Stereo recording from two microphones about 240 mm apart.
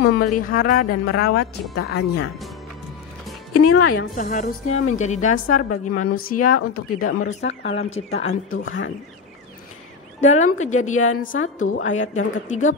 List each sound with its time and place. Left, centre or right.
0.2 s a woman's voice: left
3.5 s a woman's voice: left
3.9 s a woman's voice: left
5.3 s a woman's voice: left
7.0 s a woman's voice: left
8.3 s a woman's voice: left
10.2 s a woman's voice: left
11.0 s a woman's voice: left
11.4 s a woman's voice: left